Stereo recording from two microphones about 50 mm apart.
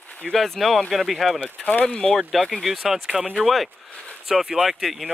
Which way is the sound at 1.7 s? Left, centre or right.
Left.